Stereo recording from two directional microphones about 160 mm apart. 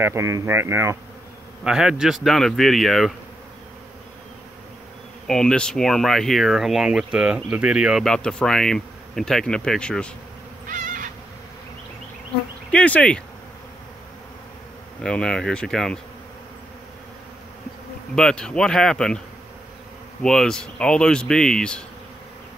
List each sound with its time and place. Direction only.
0.0 s speech: 20° right (ahead or behind)
1.6 s speech: 5° right (ahead or behind)
5.2 s speech: 5° left (ahead or behind)
10.7 s insect: 55° right (ahead or behind)
12.7 s speech: 10° left (ahead or behind)
15.0 s speech: 5° left (ahead or behind)
18.1 s speech: 5° left (ahead or behind)
20.2 s speech: 5° left (ahead or behind)